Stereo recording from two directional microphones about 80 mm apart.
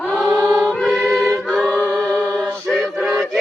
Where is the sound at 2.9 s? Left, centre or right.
Centre.